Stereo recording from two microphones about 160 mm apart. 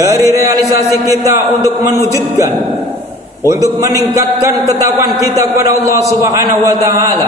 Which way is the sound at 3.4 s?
20° right (ahead or behind).